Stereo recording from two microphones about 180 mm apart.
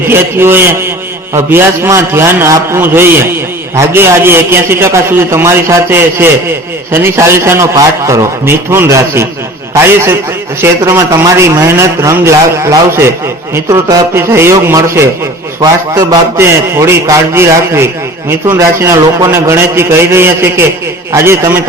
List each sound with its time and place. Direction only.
0.1 s a man's voice: 15° right (ahead or behind)
14.2 s a man's voice: 15° right (ahead or behind)